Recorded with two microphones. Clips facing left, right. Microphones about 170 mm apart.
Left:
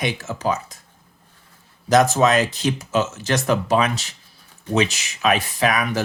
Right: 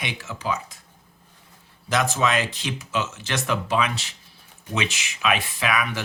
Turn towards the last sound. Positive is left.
turn(degrees=40)  # may be behind; listen again after turning